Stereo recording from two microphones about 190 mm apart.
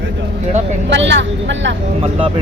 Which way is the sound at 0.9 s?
75° right (ahead or behind).